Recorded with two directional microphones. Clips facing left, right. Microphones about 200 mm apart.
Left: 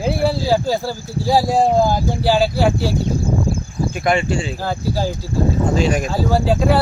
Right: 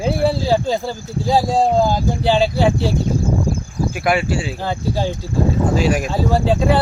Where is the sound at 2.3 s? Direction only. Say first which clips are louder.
Even; 5° left (ahead or behind).